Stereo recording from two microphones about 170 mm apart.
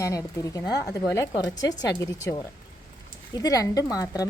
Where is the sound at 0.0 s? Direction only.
20° left (ahead or behind).